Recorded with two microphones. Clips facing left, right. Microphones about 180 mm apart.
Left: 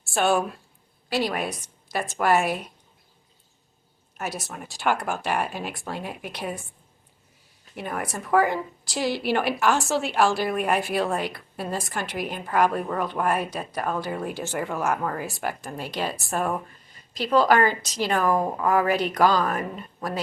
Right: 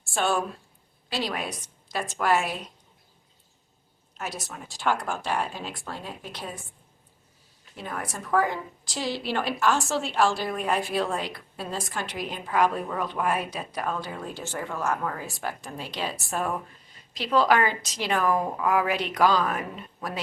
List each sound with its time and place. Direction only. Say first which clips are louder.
0.0 s a woman's voice: left 4 dB; 5° left (ahead or behind)
1.9 s speech: left 3 dB; 5° left (ahead or behind)
2.3 s a woman's voice: left 3 dB; 55° left (ahead or behind)
4.2 s speech: left 3 dB; 5° left (ahead or behind)
8.1 s a woman's voice: left 4 dB; 5° left (ahead or behind)